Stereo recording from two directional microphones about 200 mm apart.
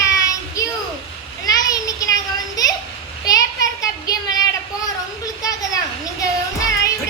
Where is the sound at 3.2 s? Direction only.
15° left (ahead or behind).